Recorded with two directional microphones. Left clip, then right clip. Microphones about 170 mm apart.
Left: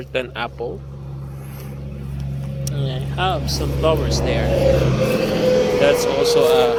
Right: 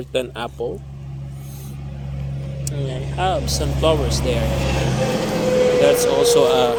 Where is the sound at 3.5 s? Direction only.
30° right (ahead or behind).